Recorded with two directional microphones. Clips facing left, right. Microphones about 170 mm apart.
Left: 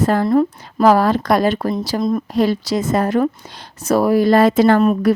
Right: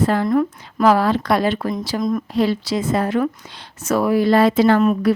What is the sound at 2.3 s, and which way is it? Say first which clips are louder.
Speech: left 2 dB; 45° left (ahead or behind).